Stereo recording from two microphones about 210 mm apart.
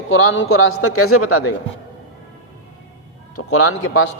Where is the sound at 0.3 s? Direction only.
75° left (ahead or behind); by 1.5 s 90° left.